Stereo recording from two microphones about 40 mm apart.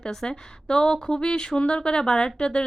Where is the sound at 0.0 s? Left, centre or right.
Centre.